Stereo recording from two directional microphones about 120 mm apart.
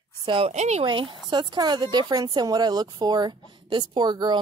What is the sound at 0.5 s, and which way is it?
Speech, 70° right (ahead or behind).